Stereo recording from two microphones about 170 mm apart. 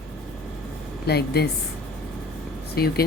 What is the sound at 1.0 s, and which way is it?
Speech, 70° left (ahead or behind).